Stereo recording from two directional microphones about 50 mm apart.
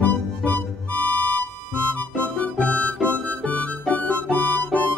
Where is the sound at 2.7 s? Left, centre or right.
Left.